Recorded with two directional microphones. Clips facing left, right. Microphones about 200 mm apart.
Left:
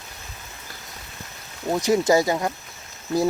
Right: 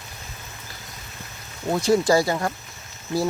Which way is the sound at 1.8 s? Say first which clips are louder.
Even; 20° left (ahead or behind).